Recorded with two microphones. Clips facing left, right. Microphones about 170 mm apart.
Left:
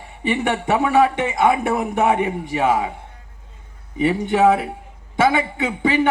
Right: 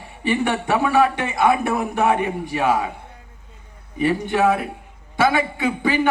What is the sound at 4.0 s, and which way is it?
A man's voice, 20° left (ahead or behind).